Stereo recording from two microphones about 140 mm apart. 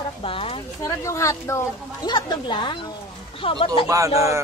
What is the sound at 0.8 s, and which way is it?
A woman's voice, 20° left (ahead or behind).